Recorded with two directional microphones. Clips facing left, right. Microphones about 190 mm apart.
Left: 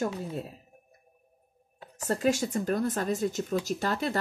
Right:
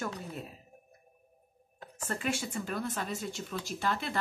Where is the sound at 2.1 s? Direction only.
40° left (ahead or behind).